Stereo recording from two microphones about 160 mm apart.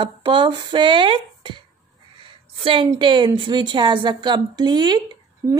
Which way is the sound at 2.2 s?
30° right (ahead or behind).